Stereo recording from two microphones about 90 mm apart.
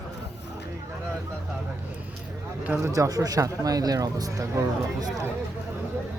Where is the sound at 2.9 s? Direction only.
40° right (ahead or behind).